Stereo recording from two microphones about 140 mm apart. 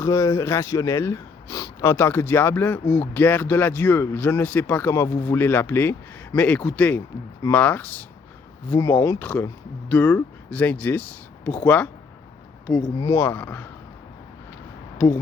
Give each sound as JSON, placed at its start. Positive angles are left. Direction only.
{"t": 0.0, "sound": "a man's voice", "side_deg": 20}
{"t": 13.0, "sound": "speech", "side_deg": 25}
{"t": 13.2, "sound": "a man's voice", "side_deg": 10}